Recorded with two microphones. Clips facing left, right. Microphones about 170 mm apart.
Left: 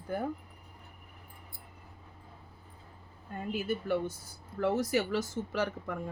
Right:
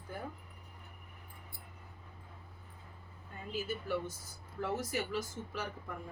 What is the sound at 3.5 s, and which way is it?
Speech, 60° left (ahead or behind).